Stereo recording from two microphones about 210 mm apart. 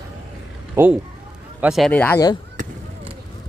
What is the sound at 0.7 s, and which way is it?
Speech, 10° right (ahead or behind).